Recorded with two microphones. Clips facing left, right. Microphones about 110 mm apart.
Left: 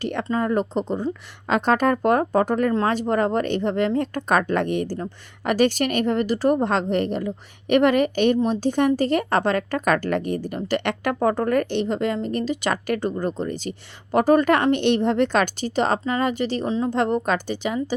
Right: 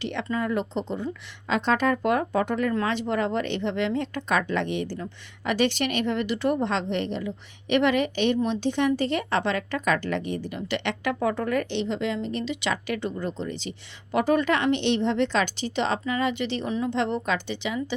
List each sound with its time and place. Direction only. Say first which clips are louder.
0.0 s a woman's voice: left 4 dB; 45° left (ahead or behind)